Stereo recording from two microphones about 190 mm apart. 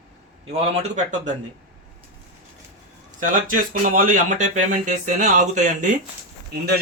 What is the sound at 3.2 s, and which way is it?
Speech, 45° right (ahead or behind).